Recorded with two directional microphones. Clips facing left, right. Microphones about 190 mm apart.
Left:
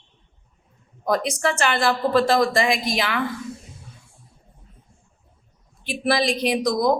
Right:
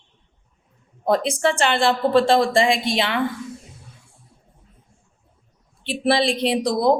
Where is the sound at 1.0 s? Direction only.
30° right (ahead or behind).